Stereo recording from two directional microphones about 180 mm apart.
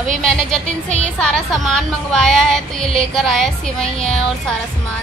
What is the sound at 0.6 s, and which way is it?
Speech, 40° right (ahead or behind).